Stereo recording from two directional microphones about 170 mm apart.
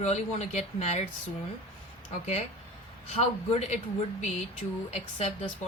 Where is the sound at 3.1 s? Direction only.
40° left (ahead or behind).